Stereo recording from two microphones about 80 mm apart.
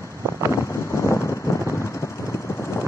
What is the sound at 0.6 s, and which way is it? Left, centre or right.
Vehicle, left.